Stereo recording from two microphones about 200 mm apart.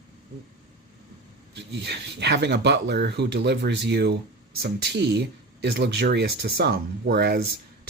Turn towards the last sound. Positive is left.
turn(degrees=-50)  # may be behind; listen again after turning